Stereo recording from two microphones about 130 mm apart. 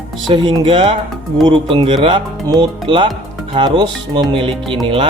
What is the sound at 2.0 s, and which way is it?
Music, 35° right (ahead or behind).